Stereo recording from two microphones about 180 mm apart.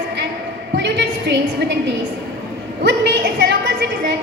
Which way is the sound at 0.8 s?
75° right (ahead or behind).